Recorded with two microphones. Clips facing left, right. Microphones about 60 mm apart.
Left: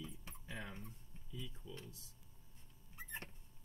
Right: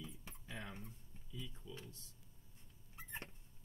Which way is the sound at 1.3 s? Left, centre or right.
Centre.